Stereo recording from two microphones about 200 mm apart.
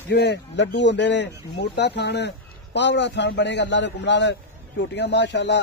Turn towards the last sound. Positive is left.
turn(degrees=60)  # may be behind; listen again after turning